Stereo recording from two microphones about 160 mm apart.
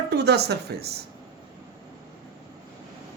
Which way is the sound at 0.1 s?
90° right.